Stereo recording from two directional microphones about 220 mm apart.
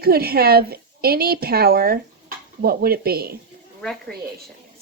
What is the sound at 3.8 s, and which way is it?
Speech, 5° left (ahead or behind).